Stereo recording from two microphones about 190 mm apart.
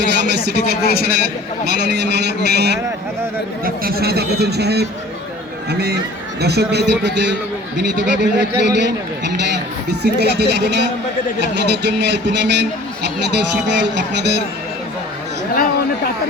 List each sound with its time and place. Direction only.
0.0 s a man's voice: 65° right (ahead or behind)
6.4 s a man's voice: 60° right (ahead or behind)